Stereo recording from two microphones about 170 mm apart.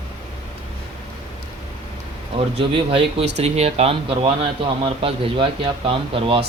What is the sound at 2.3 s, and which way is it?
A man's voice, 35° right (ahead or behind).